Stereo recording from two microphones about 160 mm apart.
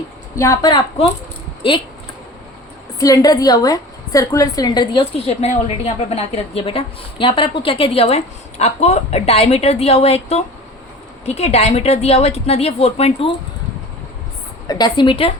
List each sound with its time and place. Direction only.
0.3 s a woman's voice: 20° left (ahead or behind)
3.0 s a woman's voice: 20° left (ahead or behind); by 13.3 s 40° left (ahead or behind)
14.7 s a woman's voice: 25° left (ahead or behind)